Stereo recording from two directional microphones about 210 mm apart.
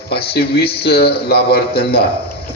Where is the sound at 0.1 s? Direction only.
50° left (ahead or behind).